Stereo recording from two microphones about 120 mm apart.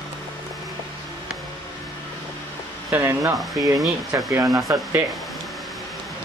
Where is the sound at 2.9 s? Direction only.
15° right (ahead or behind).